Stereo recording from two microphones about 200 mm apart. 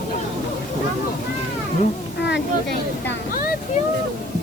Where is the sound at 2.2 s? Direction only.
60° left (ahead or behind).